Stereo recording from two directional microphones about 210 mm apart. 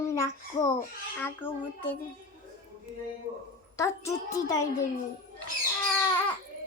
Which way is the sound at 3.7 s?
15° left (ahead or behind).